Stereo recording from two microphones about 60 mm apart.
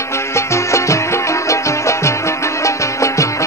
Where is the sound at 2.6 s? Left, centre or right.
Left.